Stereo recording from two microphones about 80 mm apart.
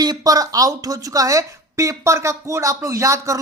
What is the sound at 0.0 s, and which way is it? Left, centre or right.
Speech, right.